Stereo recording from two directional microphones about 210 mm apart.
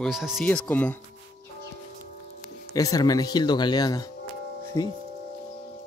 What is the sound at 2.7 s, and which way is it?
Speech, 15° left (ahead or behind).